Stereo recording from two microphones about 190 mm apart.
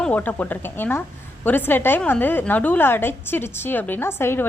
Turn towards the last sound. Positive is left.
turn(degrees=10)  # may be behind; listen again after turning